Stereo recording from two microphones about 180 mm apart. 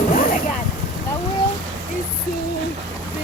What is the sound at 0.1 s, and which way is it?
Vehicle, 50° left (ahead or behind).